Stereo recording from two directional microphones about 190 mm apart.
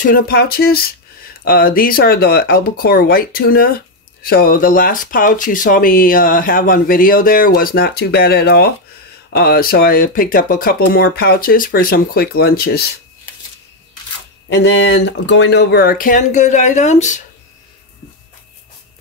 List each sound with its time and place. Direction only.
0.0 s speech: 50° left (ahead or behind)
14.5 s speech: 70° left (ahead or behind); by 17.2 s 40° left (ahead or behind)